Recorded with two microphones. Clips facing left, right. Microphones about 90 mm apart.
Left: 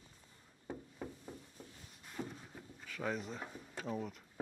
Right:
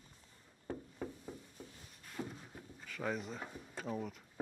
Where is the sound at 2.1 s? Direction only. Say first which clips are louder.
Even; centre (ahead or behind).